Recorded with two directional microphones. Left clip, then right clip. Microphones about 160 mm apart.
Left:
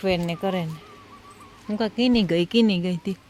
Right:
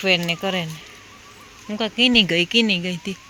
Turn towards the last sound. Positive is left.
turn(degrees=30)  # may be behind; listen again after turning